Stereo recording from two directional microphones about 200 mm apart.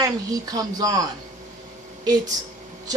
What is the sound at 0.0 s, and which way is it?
A woman's voice, 20° right (ahead or behind).